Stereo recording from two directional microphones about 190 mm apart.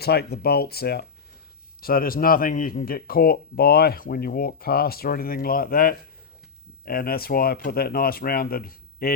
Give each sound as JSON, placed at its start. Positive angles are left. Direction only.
{"t": 0.0, "sound": "speech", "side_deg": 55}